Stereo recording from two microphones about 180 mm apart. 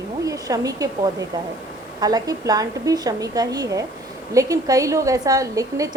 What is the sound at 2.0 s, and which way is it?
A woman's voice, 20° right (ahead or behind).